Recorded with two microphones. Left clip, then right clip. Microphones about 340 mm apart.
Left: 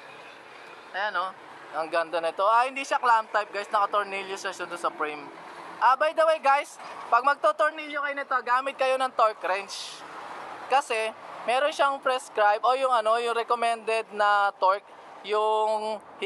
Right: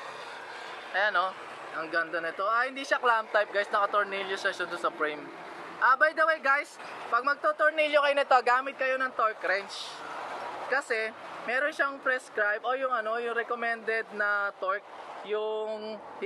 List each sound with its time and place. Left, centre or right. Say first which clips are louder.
0.9 s speech: right 2 dB; centre
8.6 s speech: left 4 dB; centre
15.4 s a sound: left 8 dB; left
15.8 s mantra: left 6 dB; centre